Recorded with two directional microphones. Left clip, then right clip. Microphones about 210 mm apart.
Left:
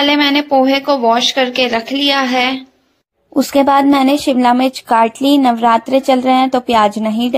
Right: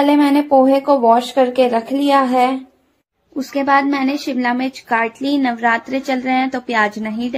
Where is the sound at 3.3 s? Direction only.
35° left (ahead or behind).